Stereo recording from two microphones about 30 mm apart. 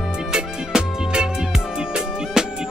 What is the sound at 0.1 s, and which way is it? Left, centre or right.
Music, right.